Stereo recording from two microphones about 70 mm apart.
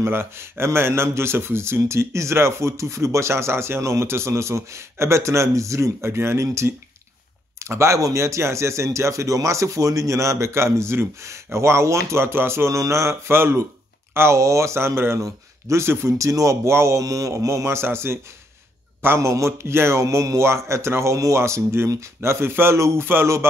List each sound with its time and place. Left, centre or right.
0.0 s speech: right
17.6 s speech: right